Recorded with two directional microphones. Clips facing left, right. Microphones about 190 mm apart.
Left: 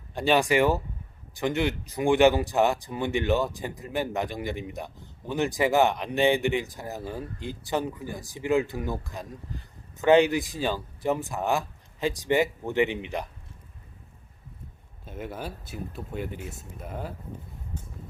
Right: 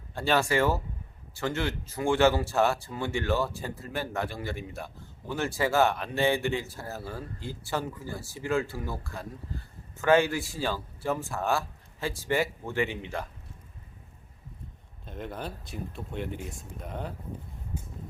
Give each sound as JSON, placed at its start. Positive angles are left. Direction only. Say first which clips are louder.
{"t": 0.1, "sound": "speech", "louder": "left 3 dB", "side_deg": 15}
{"t": 15.0, "sound": "speech", "louder": "left 1 dB", "side_deg": 5}
{"t": 17.7, "sound": "vehicle", "louder": "right 2 dB", "side_deg": -10}